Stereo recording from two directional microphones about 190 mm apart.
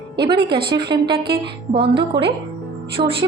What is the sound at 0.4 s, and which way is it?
Speech, 25° right (ahead or behind).